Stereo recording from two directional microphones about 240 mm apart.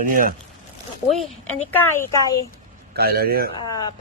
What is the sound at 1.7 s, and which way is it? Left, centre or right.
Speech, centre.